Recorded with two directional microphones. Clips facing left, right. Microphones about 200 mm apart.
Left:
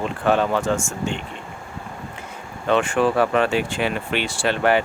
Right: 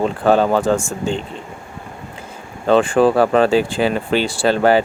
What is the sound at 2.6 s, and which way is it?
Speech, 35° right (ahead or behind).